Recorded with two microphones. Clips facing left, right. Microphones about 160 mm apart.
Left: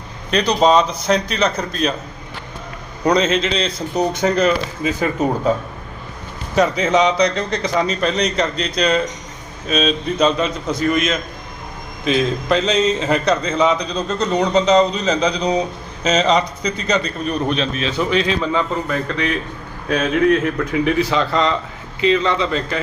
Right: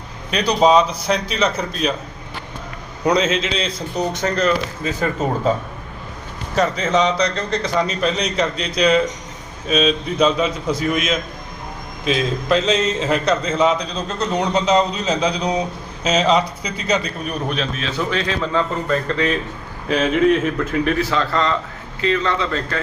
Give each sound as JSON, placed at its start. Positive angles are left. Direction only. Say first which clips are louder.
{"t": 0.3, "sound": "a man's voice", "louder": "even", "side_deg": -5}
{"t": 3.0, "sound": "speech", "louder": "left 2 dB", "side_deg": -5}
{"t": 4.2, "sound": "a man's voice", "louder": "left 2 dB", "side_deg": 10}
{"t": 6.6, "sound": "a man's voice", "louder": "left 2 dB", "side_deg": 10}
{"t": 7.9, "sound": "a man's voice", "louder": "left 2 dB", "side_deg": -5}
{"t": 18.1, "sound": "a man's voice", "louder": "left 2 dB", "side_deg": 15}
{"t": 19.9, "sound": "speech", "louder": "even", "side_deg": -5}
{"t": 20.7, "sound": "a man's voice", "louder": "left 3 dB", "side_deg": 15}